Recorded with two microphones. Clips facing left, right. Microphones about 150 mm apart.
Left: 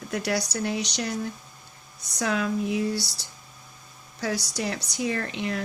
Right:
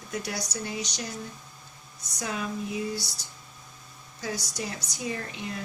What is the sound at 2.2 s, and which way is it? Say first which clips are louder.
Speech: left 6 dB; 80° left.